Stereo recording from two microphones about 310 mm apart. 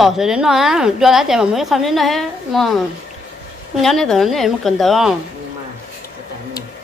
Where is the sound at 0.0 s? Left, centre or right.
Centre.